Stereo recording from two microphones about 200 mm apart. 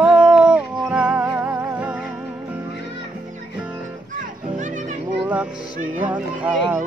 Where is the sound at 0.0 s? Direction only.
5° right (ahead or behind).